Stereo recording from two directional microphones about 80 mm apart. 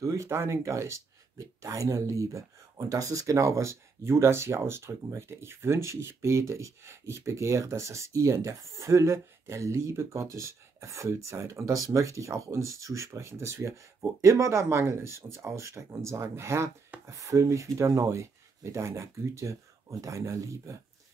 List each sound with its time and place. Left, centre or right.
0.0 s speech: right